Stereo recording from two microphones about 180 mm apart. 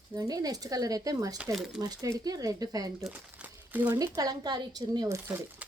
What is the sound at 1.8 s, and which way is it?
Speech, 20° right (ahead or behind).